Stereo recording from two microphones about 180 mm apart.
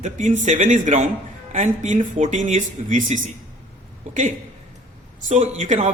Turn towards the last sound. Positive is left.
turn(degrees=-40)  # may be behind; listen again after turning